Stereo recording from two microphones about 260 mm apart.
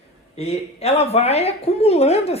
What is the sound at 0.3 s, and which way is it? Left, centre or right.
Speech, left.